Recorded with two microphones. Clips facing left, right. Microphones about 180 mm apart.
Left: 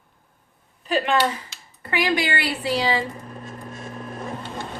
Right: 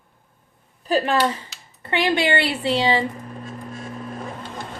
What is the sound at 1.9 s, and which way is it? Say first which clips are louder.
A woman's voice: right 3 dB; 25° right (ahead or behind).